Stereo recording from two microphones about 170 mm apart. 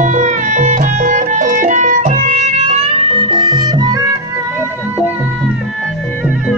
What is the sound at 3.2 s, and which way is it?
Music, 30° right (ahead or behind).